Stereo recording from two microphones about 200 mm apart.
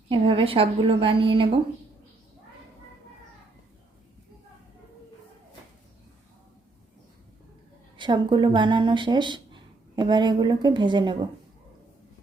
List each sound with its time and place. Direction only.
0.1 s a woman's voice: 25° right (ahead or behind)
7.9 s speech: 25° right (ahead or behind)